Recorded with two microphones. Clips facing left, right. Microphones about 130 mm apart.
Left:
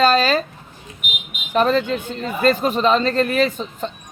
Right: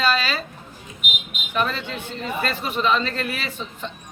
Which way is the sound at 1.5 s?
40° left (ahead or behind).